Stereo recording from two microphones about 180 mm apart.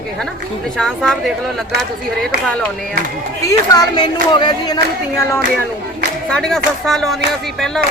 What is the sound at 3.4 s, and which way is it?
Speech, 20° left (ahead or behind).